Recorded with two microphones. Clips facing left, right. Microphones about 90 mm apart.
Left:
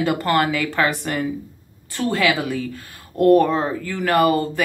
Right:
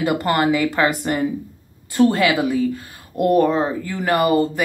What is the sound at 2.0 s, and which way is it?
Speech, 30° right (ahead or behind).